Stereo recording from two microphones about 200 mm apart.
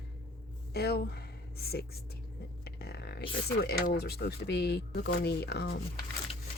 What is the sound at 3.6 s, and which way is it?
Speech, 55° left (ahead or behind).